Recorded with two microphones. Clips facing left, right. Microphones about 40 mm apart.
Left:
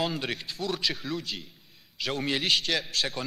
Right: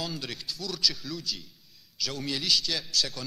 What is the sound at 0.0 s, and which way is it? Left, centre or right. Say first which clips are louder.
A man's voice: left 5 dB; left.